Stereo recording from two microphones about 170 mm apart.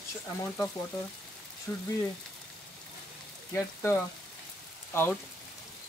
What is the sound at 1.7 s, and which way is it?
Speech, 15° left (ahead or behind).